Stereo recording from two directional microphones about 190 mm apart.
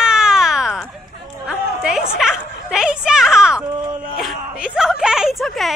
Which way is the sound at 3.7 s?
25° right (ahead or behind).